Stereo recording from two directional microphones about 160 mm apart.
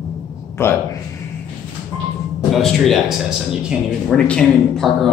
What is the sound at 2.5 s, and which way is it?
Speech, centre (ahead or behind).